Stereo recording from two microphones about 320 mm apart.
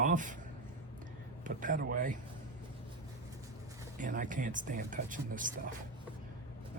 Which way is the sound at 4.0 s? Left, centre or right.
Right.